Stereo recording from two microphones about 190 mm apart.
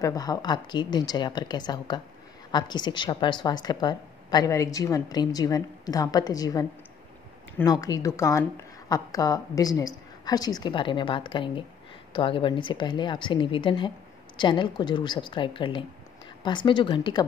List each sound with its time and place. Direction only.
0.0 s a woman's voice: 20° left (ahead or behind)